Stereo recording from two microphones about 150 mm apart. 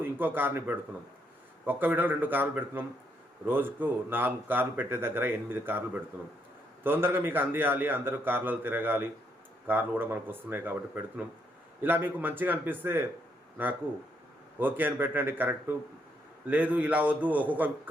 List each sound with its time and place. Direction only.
0.0 s speech: 15° right (ahead or behind)